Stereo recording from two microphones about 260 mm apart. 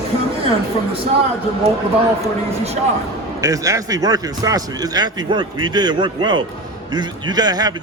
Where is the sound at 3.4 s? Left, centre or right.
Centre.